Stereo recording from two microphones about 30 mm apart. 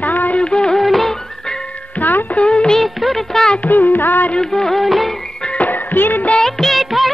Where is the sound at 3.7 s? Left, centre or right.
Left.